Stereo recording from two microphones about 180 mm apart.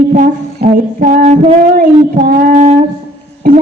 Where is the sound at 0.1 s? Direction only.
45° right (ahead or behind).